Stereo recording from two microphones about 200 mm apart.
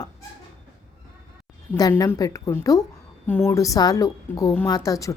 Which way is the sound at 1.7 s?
20° left (ahead or behind).